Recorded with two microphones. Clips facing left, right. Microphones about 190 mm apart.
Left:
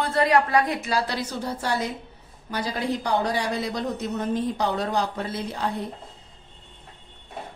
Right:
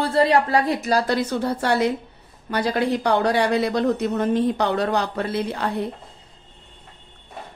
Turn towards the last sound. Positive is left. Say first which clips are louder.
# right 4 dB
turn(degrees=-65)  # may be behind; listen again after turning